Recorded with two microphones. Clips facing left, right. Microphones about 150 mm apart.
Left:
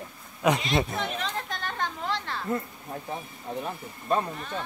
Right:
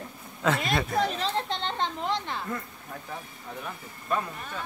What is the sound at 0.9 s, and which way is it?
Speech, 35° right (ahead or behind).